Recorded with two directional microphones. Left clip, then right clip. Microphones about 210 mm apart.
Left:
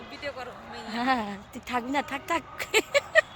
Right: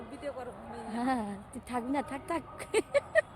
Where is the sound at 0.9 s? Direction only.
10° left (ahead or behind).